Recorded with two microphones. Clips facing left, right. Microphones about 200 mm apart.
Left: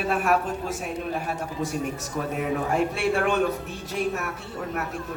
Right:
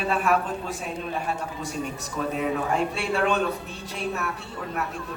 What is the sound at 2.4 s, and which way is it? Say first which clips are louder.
Speech: left 1 dB; 50° left (ahead or behind).